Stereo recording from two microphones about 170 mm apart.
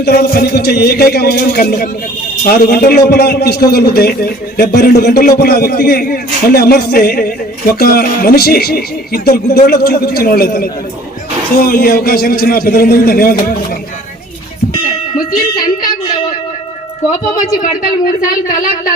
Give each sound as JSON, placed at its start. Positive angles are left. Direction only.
{"t": 0.0, "sound": "a man's voice", "side_deg": 70}
{"t": 17.1, "sound": "speech", "side_deg": 50}